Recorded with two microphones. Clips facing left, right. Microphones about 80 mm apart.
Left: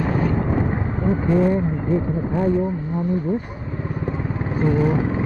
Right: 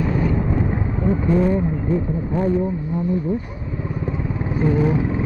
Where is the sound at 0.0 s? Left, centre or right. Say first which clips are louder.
Even; left.